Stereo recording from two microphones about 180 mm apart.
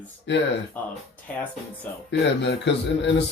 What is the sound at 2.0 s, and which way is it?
Speech, 75° left (ahead or behind).